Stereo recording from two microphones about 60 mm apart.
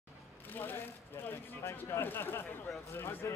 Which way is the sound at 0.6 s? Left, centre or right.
Left.